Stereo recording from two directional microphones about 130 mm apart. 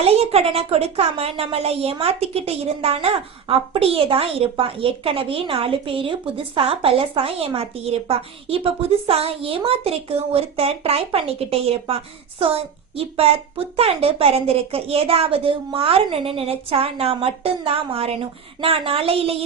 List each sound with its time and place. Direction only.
0.0 s a woman's voice: 50° right (ahead or behind)